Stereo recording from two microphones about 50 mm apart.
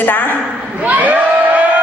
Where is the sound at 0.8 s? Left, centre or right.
Right.